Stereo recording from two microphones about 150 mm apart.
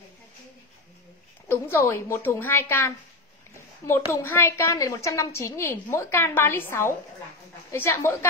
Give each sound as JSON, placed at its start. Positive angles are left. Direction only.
{"t": 1.5, "sound": "a woman's voice", "side_deg": 15}